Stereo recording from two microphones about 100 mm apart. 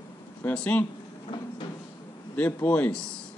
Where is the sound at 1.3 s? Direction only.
55° left (ahead or behind).